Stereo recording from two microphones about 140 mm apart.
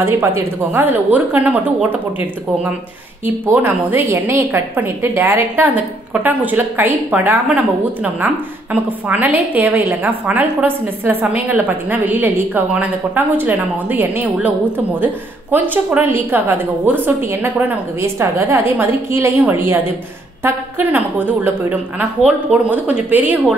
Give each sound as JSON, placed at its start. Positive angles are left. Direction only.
{"t": 0.0, "sound": "a woman's voice", "side_deg": -20}
{"t": 8.7, "sound": "a woman's voice", "side_deg": -10}
{"t": 15.5, "sound": "a woman's voice", "side_deg": -10}